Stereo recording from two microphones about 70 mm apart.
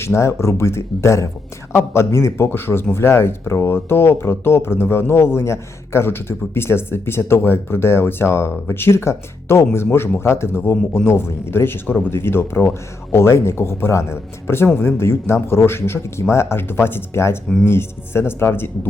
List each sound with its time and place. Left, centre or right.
0.0 s speech: left